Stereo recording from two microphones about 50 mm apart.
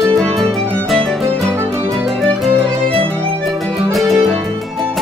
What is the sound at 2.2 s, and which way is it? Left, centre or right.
Violin, centre.